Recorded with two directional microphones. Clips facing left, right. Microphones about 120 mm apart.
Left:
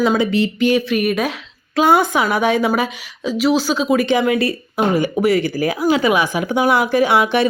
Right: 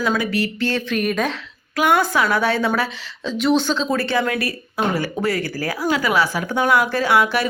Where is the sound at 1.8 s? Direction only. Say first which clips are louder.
Left 3 dB; 20° left (ahead or behind).